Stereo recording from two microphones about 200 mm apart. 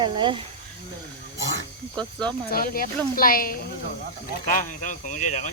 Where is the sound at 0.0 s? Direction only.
25° right (ahead or behind).